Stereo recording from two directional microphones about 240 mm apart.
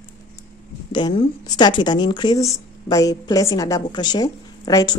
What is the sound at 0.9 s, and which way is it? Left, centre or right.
Speech, centre.